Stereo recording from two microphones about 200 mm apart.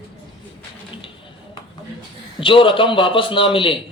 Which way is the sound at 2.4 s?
25° left (ahead or behind).